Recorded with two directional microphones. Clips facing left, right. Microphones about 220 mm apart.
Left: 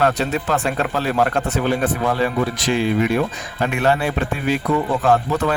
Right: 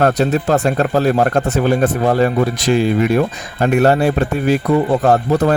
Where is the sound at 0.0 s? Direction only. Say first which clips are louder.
Right 5 dB; 40° right (ahead or behind).